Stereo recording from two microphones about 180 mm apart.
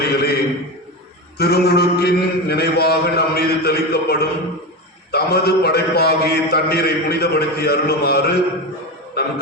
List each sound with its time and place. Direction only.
0.0 s a sound: 60° left (ahead or behind)
1.4 s a man's voice: 65° left (ahead or behind)
9.2 s music: 60° left (ahead or behind)